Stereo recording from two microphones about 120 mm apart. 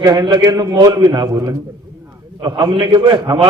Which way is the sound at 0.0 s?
35° right (ahead or behind).